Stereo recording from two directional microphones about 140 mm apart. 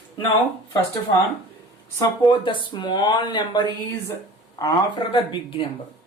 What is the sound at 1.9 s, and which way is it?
Speech, 30° left (ahead or behind).